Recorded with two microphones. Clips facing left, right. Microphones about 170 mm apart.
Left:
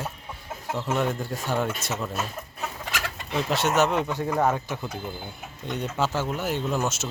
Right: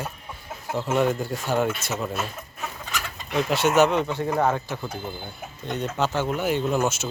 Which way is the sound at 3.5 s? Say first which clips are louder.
Right 4 dB; centre (ahead or behind).